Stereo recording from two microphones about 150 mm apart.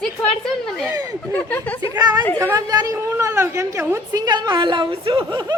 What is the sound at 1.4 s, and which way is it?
Speech, 10° left (ahead or behind).